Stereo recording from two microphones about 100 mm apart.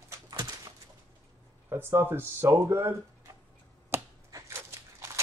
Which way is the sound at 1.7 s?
25° right (ahead or behind).